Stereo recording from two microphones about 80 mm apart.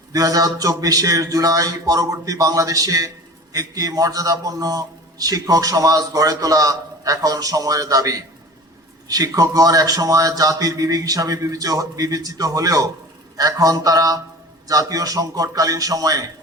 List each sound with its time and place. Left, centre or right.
0.1 s a man's voice: right